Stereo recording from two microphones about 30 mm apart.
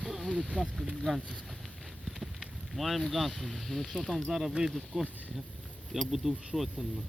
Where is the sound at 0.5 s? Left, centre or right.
Left.